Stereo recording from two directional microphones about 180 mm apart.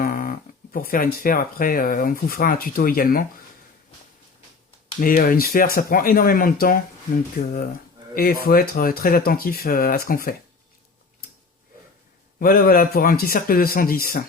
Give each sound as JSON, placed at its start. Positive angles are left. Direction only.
{"t": 0.0, "sound": "speech", "side_deg": 50}
{"t": 4.9, "sound": "speech", "side_deg": 50}
{"t": 12.4, "sound": "speech", "side_deg": 55}